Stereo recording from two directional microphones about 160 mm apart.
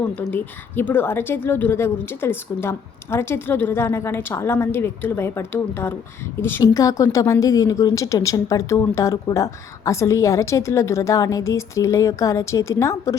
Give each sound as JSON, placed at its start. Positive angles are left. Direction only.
{"t": 0.2, "sound": "a woman's voice", "side_deg": 10}